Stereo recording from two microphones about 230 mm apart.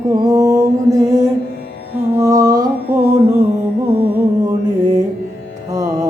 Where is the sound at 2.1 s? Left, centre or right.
Centre.